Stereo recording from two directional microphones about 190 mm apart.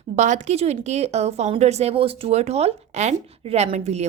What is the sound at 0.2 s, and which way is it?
A woman's voice, 40° right (ahead or behind).